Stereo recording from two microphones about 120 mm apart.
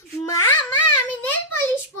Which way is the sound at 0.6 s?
15° left (ahead or behind).